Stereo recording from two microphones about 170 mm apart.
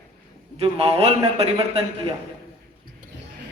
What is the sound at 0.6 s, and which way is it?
A man's voice, 35° right (ahead or behind).